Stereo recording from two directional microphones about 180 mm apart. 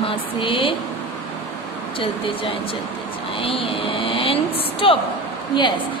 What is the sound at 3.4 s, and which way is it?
Vehicle, 30° left (ahead or behind).